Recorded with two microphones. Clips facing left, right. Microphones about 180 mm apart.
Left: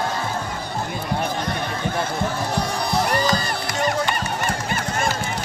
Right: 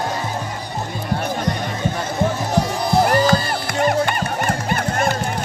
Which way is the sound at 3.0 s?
50° right (ahead or behind).